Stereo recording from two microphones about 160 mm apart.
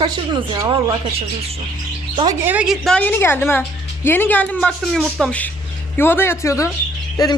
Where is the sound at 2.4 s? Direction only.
5° right (ahead or behind).